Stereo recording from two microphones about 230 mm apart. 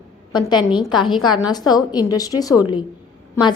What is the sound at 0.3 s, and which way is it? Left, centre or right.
A woman's voice, centre.